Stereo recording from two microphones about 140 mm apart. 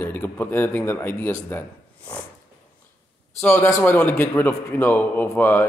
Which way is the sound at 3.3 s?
10° left (ahead or behind).